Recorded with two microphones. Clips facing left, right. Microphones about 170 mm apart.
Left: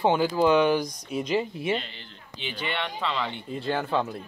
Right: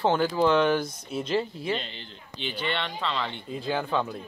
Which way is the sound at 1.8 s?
25° right (ahead or behind).